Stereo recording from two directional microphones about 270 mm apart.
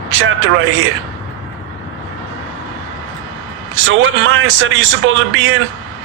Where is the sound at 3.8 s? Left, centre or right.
Right.